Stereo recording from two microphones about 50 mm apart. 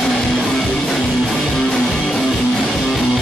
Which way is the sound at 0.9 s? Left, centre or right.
Centre.